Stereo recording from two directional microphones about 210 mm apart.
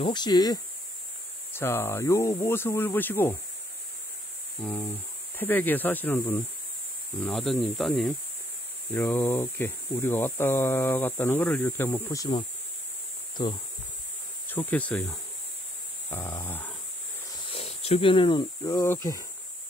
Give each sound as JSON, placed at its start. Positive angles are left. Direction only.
{"t": 0.0, "sound": "speech", "side_deg": 20}
{"t": 4.6, "sound": "speech", "side_deg": 10}
{"t": 14.5, "sound": "speech", "side_deg": 10}
{"t": 17.5, "sound": "speech", "side_deg": 30}